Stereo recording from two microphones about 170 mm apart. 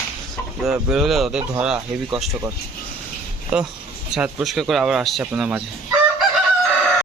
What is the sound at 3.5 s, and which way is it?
Speech, 5° right (ahead or behind).